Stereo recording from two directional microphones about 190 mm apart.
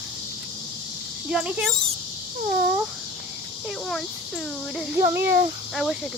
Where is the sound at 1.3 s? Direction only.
5° right (ahead or behind).